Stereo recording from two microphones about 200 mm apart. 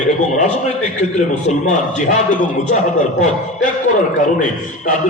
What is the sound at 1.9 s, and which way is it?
Speech, 40° left (ahead or behind).